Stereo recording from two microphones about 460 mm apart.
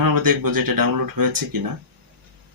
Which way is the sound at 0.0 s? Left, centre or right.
Right.